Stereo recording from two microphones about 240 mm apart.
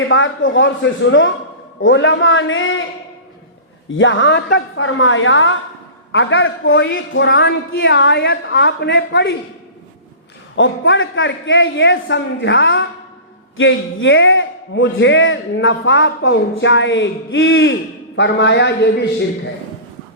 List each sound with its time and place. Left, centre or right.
0.1 s a man's voice: left
3.9 s a man's voice: left
10.5 s a man's voice: left